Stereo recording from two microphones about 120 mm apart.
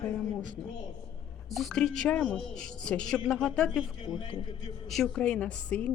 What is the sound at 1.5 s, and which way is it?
A woman's voice, 5° left (ahead or behind).